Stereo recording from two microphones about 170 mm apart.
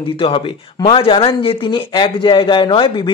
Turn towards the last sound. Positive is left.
turn(degrees=30)  # may be behind; listen again after turning